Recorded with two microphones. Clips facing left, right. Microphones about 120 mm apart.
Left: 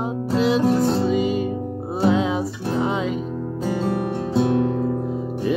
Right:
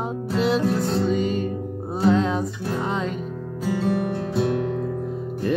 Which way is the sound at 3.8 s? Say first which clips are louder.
Right 1 dB; 25° left (ahead or behind).